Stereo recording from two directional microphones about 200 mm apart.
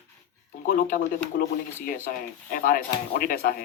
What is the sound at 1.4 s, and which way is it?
Speech, 45° left (ahead or behind).